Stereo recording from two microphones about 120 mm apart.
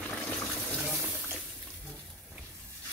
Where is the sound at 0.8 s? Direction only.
Centre (ahead or behind).